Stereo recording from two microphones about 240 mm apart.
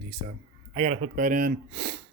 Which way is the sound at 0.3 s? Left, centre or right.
Right.